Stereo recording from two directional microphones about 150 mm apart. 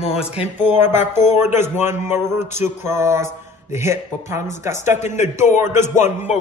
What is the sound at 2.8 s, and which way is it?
Mantra, 20° right (ahead or behind).